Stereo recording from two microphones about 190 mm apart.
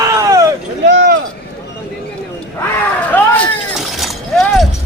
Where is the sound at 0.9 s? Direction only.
65° right (ahead or behind).